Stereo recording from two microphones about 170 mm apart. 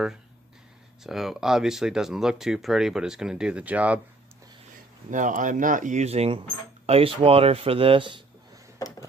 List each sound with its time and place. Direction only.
1.0 s speech: centre (ahead or behind)
5.1 s speech: 50° right (ahead or behind); by 8.2 s 30° right (ahead or behind)